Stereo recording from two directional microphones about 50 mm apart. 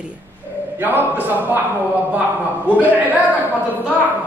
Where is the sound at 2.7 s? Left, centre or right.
Right.